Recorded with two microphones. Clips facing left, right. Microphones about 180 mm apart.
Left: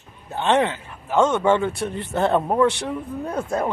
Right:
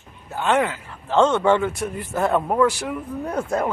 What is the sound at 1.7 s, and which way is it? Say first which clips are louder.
A man's voice: left 1 dB; 30° left (ahead or behind).